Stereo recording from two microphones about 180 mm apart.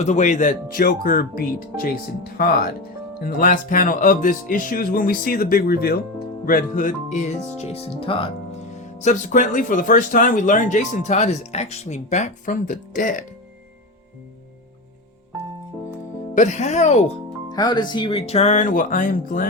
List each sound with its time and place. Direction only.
0.0 s speech: 40° left (ahead or behind)
8.7 s speech: 40° left (ahead or behind)
16.3 s speech: 40° left (ahead or behind)
17.5 s speech: 25° left (ahead or behind); by 19.5 s 50° left (ahead or behind)